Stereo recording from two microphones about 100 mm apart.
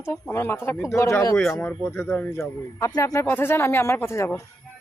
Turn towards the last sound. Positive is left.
turn(degrees=0)  # may be behind; listen again after turning